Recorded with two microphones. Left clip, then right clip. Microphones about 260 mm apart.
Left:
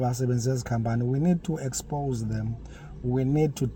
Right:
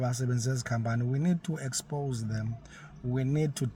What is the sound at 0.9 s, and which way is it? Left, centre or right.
Speech, centre.